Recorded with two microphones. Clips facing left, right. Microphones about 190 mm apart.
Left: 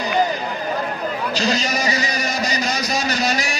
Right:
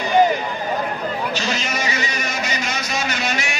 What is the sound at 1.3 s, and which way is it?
Vehicle, 35° left (ahead or behind).